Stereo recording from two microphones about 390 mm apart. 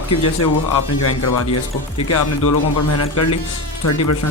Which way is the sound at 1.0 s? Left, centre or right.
Left.